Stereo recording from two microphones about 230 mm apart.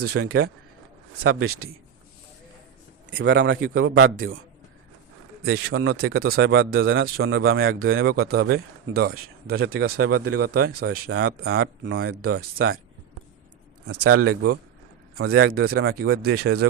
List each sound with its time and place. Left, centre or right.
0.0 s speech: right
3.2 s a man's voice: right
5.4 s a man's voice: right
7.7 s a man's voice: right
10.0 s speech: right
11.4 s a man's voice: right
11.9 s speech: right
13.8 s a man's voice: right
14.2 s speech: right
15.2 s speech: right
16.2 s a man's voice: right